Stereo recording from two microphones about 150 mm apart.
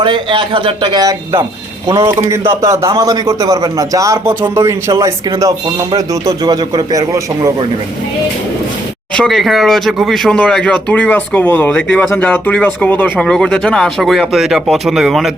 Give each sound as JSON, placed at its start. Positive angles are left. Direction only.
{"t": 0.0, "sound": "a man's voice", "side_deg": -30}
{"t": 9.1, "sound": "speech", "side_deg": 0}